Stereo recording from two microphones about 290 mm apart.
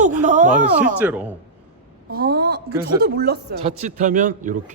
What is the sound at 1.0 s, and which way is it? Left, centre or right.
Speech, centre.